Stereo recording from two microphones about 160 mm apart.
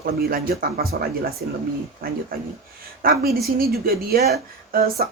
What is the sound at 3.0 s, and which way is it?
Speech, 70° right (ahead or behind).